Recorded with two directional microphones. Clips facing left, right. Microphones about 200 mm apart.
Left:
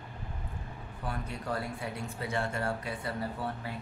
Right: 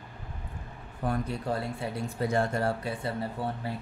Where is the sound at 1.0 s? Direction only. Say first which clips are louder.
Right 7 dB; 45° right (ahead or behind).